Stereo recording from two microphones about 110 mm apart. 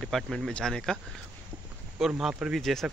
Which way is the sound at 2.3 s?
10° right (ahead or behind).